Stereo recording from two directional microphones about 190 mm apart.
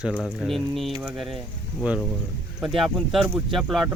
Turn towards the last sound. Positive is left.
turn(degrees=0)  # may be behind; listen again after turning